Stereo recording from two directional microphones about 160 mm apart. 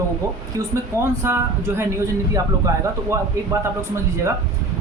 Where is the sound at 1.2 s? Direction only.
15° right (ahead or behind).